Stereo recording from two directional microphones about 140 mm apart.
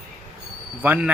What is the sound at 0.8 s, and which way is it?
Speech, 10° right (ahead or behind).